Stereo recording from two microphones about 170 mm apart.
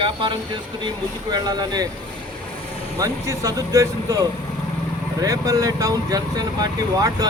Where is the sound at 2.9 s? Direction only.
20° right (ahead or behind).